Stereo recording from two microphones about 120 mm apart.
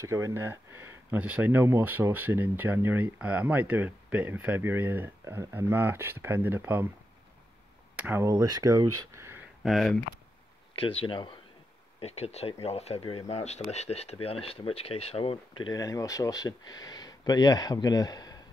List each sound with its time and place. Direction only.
0.0 s speech: 25° right (ahead or behind)
7.9 s a sound: 10° right (ahead or behind)
8.2 s speech: 25° right (ahead or behind)
9.6 s speech: centre (ahead or behind)
10.8 s speech: 45° left (ahead or behind)
12.0 s speech: 60° left (ahead or behind)
13.3 s speech: 65° left (ahead or behind); by 15.7 s 50° left (ahead or behind)
15.7 s speech: 30° left (ahead or behind)